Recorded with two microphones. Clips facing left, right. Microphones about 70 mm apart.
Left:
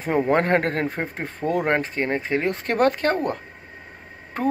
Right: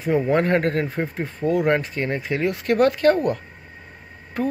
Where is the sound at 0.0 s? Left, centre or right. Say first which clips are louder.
Right 1 dB; left.